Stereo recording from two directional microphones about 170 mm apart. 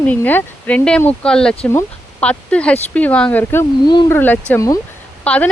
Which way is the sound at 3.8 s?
25° left (ahead or behind).